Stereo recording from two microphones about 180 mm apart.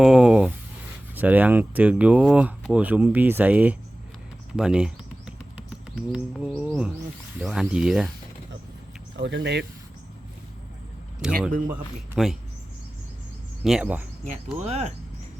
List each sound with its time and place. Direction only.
0.0 s a sound: 5° right (ahead or behind)
1.1 s speech: 10° right (ahead or behind)
4.5 s a sound: 5° right (ahead or behind)
6.1 s speech: 5° right (ahead or behind)
9.1 s speech: 75° right (ahead or behind)
11.2 s speech: 5° right (ahead or behind)
13.7 s speech: 5° right (ahead or behind)
14.3 s cricket: 35° right (ahead or behind)